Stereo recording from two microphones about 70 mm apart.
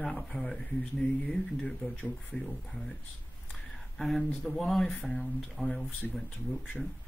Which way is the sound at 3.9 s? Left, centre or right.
Centre.